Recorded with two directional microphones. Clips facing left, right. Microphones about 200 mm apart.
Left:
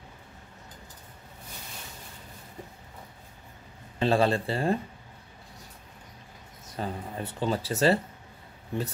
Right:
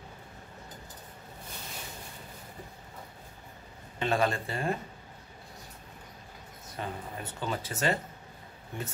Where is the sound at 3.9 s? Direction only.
30° left (ahead or behind).